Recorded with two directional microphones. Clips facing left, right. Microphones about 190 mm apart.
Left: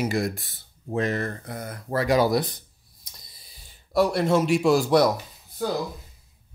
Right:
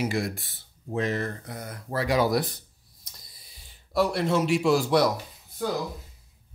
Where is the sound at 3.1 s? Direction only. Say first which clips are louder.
Left 1 dB; 15° left (ahead or behind).